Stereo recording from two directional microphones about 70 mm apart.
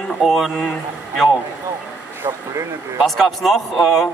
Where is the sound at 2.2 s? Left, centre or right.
Right.